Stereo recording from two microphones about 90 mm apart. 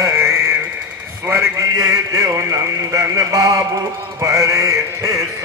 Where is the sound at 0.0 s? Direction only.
30° right (ahead or behind).